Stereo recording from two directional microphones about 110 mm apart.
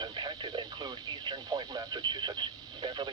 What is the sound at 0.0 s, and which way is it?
Speech, 45° right (ahead or behind).